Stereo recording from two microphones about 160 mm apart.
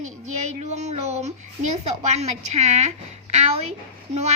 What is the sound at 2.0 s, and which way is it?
Speech, 45° right (ahead or behind).